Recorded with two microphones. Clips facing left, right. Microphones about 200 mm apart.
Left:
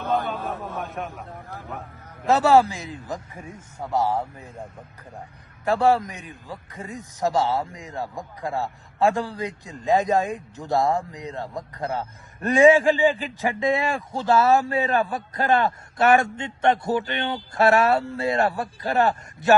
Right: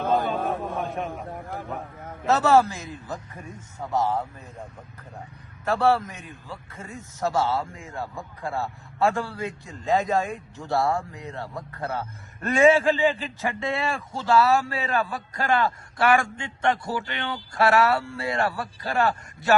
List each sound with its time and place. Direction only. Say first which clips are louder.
0.1 s speech: even; centre (ahead or behind)
1.5 s speech: right 3 dB; 50° right (ahead or behind)
2.2 s a man's voice: left 2 dB; 15° left (ahead or behind)
5.6 s a man's voice: left 2 dB; 15° left (ahead or behind)